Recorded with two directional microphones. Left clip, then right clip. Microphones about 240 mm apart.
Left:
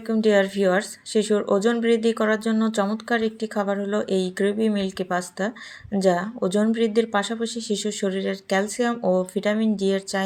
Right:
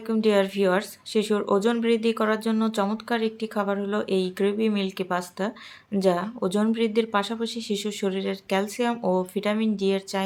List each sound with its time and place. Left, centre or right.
0.1 s speech: centre